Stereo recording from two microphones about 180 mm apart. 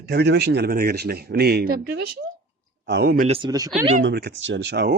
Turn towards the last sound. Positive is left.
turn(degrees=-70)  # may be behind; listen again after turning